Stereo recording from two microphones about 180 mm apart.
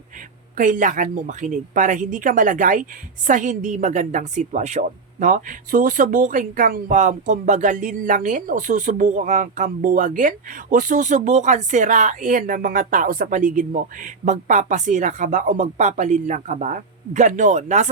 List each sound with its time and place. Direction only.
0.5 s a woman's voice: 45° right (ahead or behind)